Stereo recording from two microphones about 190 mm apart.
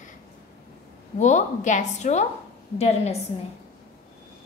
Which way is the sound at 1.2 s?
40° left (ahead or behind).